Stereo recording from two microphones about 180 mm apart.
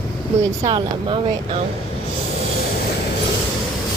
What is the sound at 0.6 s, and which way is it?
Speech, 25° right (ahead or behind).